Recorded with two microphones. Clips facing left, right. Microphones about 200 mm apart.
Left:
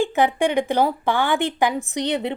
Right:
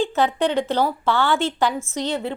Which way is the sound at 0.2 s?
15° left (ahead or behind).